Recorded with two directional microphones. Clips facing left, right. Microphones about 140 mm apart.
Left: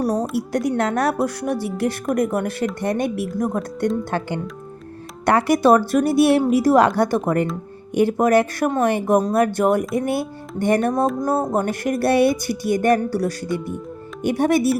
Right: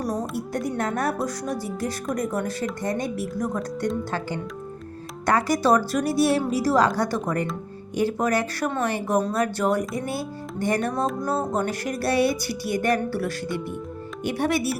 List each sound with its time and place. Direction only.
0.0 s a woman's voice: 70° left (ahead or behind); by 3.8 s 50° left (ahead or behind)
5.2 s speech: 60° left (ahead or behind)
13.1 s music: 40° left (ahead or behind)
14.3 s speech: 50° left (ahead or behind)